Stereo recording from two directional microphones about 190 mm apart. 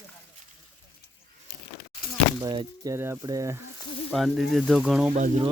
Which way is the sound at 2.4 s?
20° right (ahead or behind).